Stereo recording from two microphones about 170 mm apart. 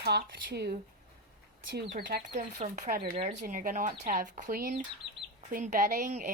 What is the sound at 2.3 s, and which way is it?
Speech, 45° right (ahead or behind).